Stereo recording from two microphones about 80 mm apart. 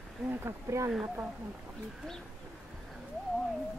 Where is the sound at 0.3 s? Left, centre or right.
Right.